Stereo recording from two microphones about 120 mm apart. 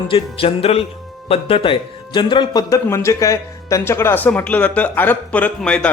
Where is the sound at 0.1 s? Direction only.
50° left (ahead or behind).